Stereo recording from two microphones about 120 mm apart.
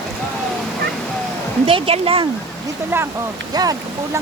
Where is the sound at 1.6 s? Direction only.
55° right (ahead or behind).